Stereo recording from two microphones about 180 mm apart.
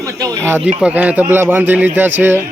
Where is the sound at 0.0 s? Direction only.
20° right (ahead or behind).